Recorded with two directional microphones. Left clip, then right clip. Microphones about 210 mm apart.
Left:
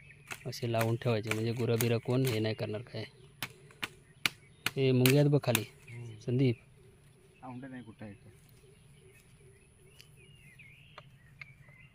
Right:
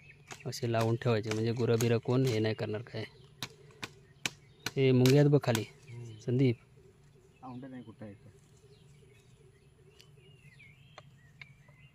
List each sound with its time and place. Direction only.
0.4 s speech: 5° right (ahead or behind)
2.2 s chop: 5° right (ahead or behind)
4.7 s speech: 10° right (ahead or behind)
7.4 s a man's voice: 15° left (ahead or behind)